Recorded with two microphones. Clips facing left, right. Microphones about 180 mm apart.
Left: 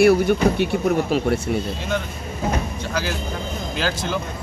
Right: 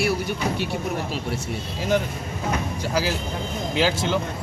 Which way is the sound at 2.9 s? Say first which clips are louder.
Right 2 dB; 30° right (ahead or behind).